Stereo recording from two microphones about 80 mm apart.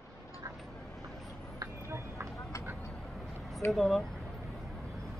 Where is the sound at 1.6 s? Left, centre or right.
Right.